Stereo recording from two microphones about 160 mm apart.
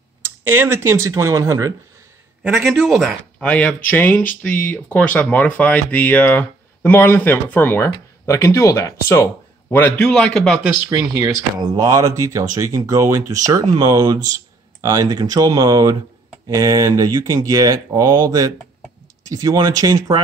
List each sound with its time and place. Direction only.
0.2 s speech: 15° right (ahead or behind)
2.4 s speech: 5° right (ahead or behind)
10.9 s speech: 20° right (ahead or behind)